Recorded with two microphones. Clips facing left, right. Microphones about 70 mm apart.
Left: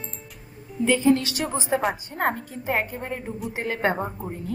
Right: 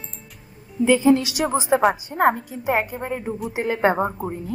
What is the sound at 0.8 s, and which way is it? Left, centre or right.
A woman's voice, centre.